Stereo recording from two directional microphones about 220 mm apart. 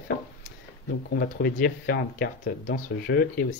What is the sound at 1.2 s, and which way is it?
Speech, 50° left (ahead or behind).